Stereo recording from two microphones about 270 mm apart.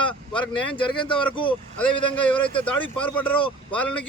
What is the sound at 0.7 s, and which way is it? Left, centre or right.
Speech, centre.